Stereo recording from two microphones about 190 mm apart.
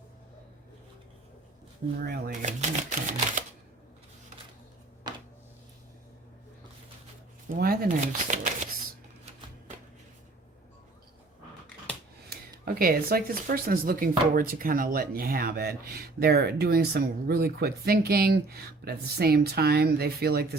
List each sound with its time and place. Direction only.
2.0 s typewriter: 50° right (ahead or behind)
5.1 s a sound: 20° right (ahead or behind)
7.4 s speech: 50° right (ahead or behind)
12.3 s speech: 50° right (ahead or behind)